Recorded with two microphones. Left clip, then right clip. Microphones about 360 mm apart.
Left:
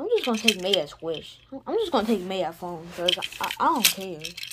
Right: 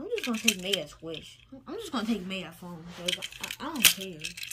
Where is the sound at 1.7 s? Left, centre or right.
Left.